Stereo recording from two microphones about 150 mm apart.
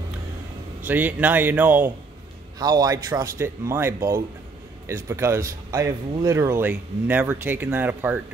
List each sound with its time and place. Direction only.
0.8 s speech: 10° right (ahead or behind)
2.6 s speech: 25° right (ahead or behind)